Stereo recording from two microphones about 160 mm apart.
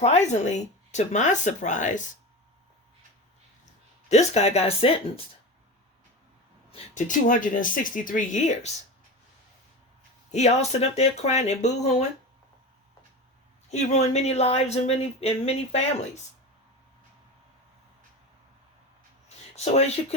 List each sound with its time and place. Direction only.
0.0 s speech: 45° left (ahead or behind)
4.1 s speech: 45° left (ahead or behind)
6.9 s speech: 55° left (ahead or behind)
10.3 s speech: 45° left (ahead or behind)
13.7 s speech: 45° left (ahead or behind)
19.5 s speech: 40° left (ahead or behind)